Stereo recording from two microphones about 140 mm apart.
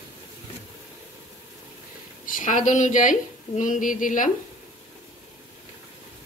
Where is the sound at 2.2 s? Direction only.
70° left (ahead or behind).